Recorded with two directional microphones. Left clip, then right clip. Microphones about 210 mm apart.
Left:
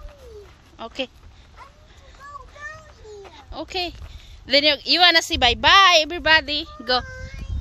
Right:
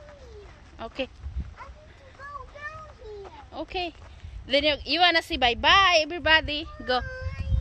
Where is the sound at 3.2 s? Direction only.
20° left (ahead or behind).